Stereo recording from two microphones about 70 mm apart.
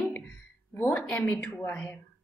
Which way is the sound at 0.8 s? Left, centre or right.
Centre.